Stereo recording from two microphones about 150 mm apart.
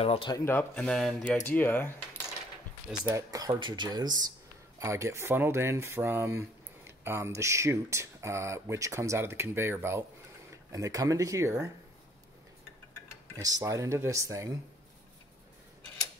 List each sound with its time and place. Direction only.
0.0 s speech: 40° left (ahead or behind)
0.5 s speech: 10° left (ahead or behind)
3.1 s speech: 25° right (ahead or behind)
13.4 s speech: 25° right (ahead or behind)